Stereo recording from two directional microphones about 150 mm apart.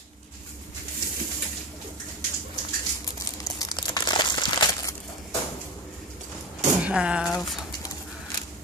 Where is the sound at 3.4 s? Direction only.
25° left (ahead or behind).